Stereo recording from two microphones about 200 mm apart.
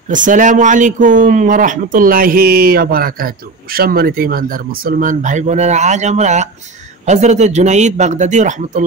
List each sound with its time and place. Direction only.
0.1 s speech: 40° right (ahead or behind)